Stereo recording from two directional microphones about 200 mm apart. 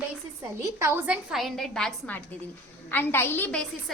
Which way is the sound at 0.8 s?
10° right (ahead or behind).